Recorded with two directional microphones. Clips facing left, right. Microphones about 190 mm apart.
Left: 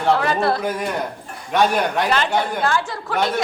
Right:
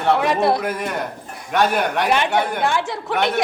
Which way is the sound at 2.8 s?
20° right (ahead or behind).